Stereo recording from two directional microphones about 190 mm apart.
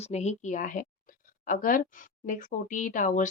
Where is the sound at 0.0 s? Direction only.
35° left (ahead or behind).